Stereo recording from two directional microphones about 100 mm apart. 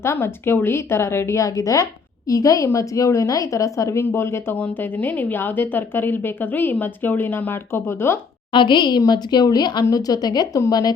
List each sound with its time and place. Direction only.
0.0 s a woman's voice: 25° left (ahead or behind)
8.5 s a woman's voice: 50° left (ahead or behind)